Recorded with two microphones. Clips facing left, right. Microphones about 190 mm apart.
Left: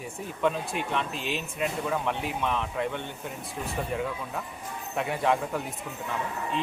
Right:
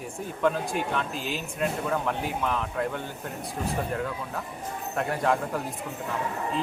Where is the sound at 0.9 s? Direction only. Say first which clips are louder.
Even; centre (ahead or behind).